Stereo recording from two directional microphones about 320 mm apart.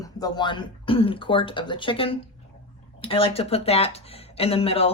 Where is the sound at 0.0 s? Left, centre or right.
Centre.